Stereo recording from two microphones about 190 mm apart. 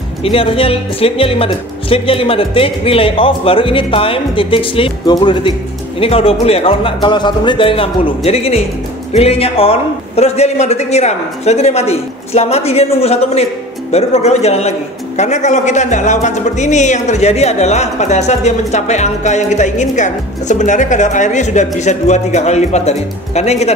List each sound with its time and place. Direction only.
0.2 s a man's voice: 30° left (ahead or behind)